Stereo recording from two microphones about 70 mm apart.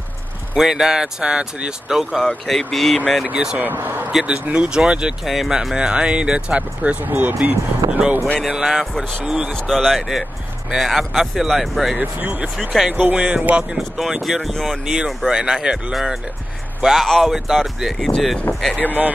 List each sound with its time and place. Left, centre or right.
0.6 s speech: centre
2.2 s speech: centre
3.3 s speech: centre
3.6 s speech: right
4.1 s speech: centre
7.1 s speech: right
8.4 s speech: centre
9.5 s speech: centre
12.0 s speech: right
12.5 s speech: centre
12.9 s speech: centre
13.7 s speech: centre